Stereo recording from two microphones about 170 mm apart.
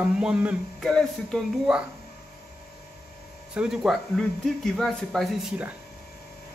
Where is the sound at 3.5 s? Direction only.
5° right (ahead or behind).